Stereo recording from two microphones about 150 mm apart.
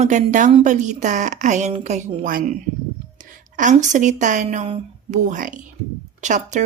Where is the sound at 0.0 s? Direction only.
55° right (ahead or behind).